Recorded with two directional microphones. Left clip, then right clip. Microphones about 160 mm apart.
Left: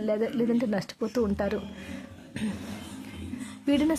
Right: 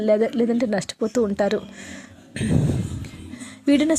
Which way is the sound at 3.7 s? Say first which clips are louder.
Right 6 dB; 25° right (ahead or behind).